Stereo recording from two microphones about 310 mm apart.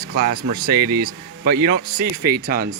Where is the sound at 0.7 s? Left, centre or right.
Right.